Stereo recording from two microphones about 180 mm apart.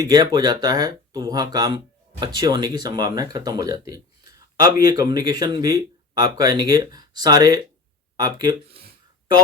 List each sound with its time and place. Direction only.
0.0 s speech: 20° right (ahead or behind)